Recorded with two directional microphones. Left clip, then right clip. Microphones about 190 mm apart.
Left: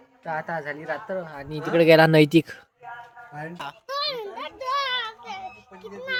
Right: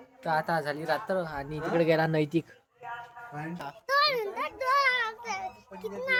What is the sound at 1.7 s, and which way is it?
Speech, 45° left (ahead or behind).